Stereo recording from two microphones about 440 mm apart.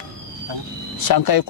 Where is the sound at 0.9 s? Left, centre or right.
Left.